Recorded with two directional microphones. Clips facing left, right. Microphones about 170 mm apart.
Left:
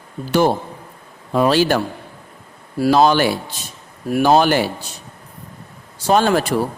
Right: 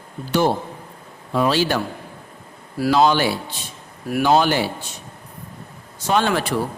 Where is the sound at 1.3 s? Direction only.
45° left (ahead or behind).